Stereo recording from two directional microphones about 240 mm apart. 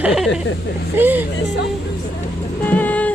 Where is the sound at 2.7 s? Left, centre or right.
Centre.